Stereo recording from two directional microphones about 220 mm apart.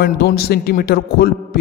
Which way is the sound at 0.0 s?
45° left (ahead or behind).